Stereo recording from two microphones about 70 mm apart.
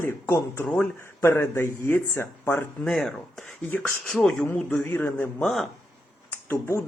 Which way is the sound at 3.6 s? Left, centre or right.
Left.